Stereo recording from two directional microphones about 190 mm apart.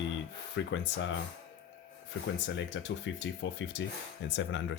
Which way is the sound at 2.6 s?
70° left (ahead or behind).